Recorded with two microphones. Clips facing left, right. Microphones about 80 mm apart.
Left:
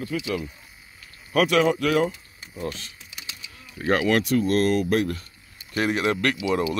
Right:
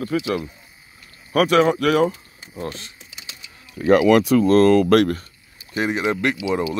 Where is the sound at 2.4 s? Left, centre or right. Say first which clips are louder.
Right 2 dB; right.